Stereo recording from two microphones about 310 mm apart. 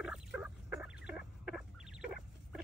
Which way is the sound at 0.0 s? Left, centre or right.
Centre.